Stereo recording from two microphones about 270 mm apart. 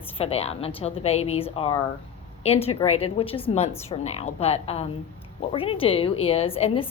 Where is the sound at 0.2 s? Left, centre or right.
Left.